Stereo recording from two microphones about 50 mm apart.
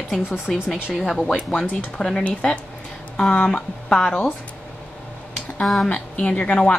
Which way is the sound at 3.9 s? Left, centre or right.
Centre.